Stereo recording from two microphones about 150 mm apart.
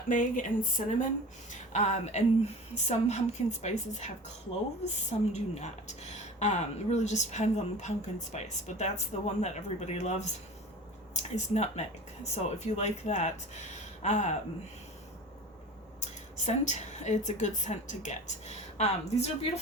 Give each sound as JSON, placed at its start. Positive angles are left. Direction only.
{"t": 0.1, "sound": "speech", "side_deg": 60}
{"t": 16.5, "sound": "speech", "side_deg": 50}